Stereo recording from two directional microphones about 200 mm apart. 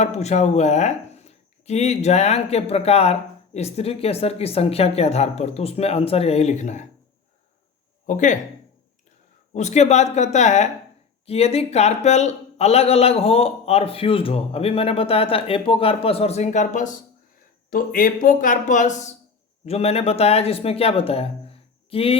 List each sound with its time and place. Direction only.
0.0 s speech: 35° left (ahead or behind)
8.0 s speech: 40° left (ahead or behind)
9.5 s speech: 35° left (ahead or behind)